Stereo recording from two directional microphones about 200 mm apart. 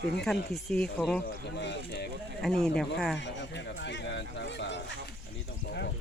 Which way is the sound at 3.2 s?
60° left (ahead or behind).